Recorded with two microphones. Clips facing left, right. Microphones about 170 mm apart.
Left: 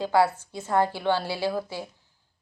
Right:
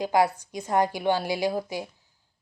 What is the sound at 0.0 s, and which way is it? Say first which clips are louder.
Speech: left 1 dB; 15° right (ahead or behind).